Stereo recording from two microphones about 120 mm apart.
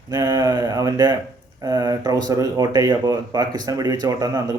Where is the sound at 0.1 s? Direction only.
35° right (ahead or behind).